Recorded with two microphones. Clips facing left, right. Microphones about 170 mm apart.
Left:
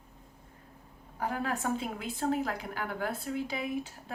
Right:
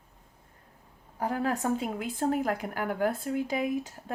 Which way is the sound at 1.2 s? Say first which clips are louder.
Right 4 dB; 35° right (ahead or behind).